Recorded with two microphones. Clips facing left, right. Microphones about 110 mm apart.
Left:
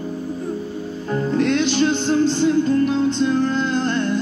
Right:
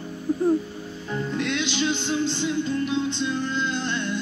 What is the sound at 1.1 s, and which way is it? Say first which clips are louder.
Music: left 8 dB; 40° left (ahead or behind).